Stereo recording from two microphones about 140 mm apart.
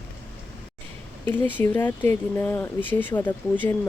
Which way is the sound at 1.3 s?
15° left (ahead or behind).